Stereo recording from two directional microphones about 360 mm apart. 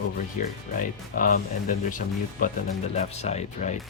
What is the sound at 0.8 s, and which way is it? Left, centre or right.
Speech, left.